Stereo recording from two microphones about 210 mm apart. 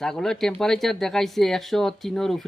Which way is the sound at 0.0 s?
Centre (ahead or behind).